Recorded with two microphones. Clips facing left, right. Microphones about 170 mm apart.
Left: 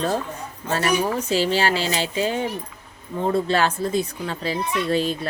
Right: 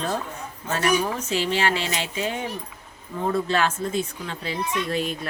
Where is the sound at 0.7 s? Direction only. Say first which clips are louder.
Left 2 dB; 35° left (ahead or behind).